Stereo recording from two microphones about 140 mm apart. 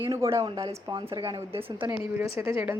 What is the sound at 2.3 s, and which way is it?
Speech, 20° right (ahead or behind).